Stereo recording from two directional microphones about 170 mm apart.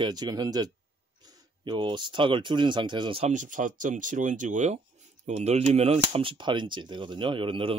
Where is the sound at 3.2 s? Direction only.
50° right (ahead or behind); by 7.8 s 30° right (ahead or behind).